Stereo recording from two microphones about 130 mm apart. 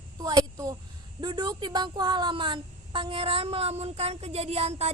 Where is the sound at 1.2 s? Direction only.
35° right (ahead or behind).